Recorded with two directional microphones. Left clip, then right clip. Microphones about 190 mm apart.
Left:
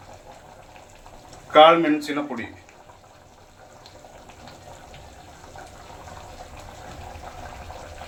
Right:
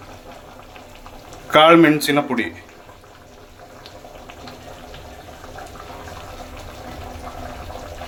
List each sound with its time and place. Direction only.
1.5 s speech: 65° right (ahead or behind)